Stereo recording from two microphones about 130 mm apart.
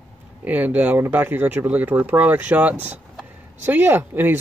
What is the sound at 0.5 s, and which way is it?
Speech, 15° right (ahead or behind).